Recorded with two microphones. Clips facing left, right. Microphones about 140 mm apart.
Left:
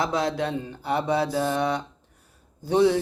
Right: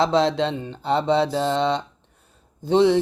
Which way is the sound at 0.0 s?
25° right (ahead or behind).